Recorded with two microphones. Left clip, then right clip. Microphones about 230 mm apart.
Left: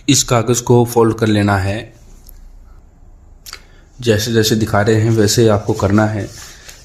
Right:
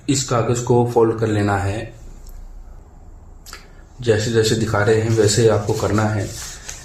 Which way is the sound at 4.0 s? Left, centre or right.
Left.